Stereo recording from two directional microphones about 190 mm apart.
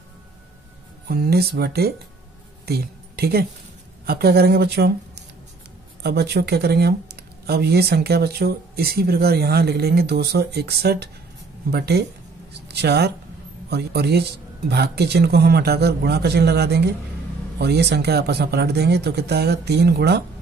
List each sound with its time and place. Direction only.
1.0 s speech: 55° right (ahead or behind)